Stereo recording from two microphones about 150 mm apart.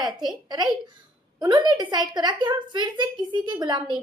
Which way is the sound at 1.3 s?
25° right (ahead or behind).